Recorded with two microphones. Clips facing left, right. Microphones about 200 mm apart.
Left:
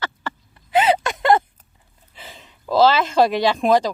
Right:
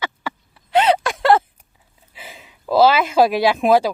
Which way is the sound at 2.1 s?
10° right (ahead or behind).